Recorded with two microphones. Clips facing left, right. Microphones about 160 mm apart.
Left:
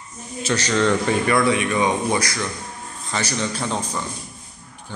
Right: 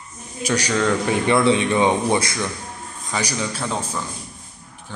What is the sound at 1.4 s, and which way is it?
Speech, 25° right (ahead or behind).